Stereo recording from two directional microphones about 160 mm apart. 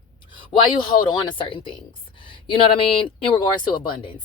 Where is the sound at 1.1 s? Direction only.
30° left (ahead or behind).